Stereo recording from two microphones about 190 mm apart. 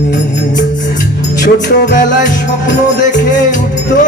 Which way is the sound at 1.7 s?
45° left (ahead or behind).